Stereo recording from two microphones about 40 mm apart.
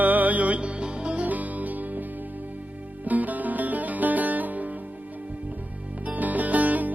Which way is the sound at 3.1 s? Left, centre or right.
Right.